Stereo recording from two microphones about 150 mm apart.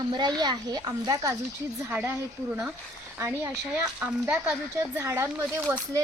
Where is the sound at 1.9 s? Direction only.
10° right (ahead or behind).